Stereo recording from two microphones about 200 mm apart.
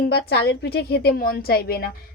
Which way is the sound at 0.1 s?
55° left (ahead or behind).